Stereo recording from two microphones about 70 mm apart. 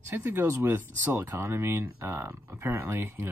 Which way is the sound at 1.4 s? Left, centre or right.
Right.